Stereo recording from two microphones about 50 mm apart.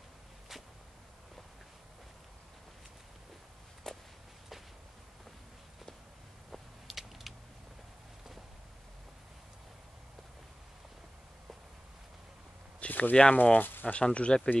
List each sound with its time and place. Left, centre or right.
3.9 s walk: centre
6.5 s a sound: centre
12.8 s speech: left
13.1 s speech: left
13.4 s speech: left
13.9 s speech: left